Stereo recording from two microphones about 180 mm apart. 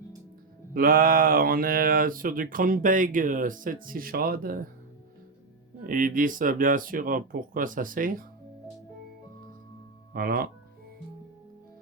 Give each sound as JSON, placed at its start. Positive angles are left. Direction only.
{"t": 0.7, "sound": "speech", "side_deg": -50}
{"t": 5.8, "sound": "speech", "side_deg": -50}
{"t": 10.1, "sound": "speech", "side_deg": -55}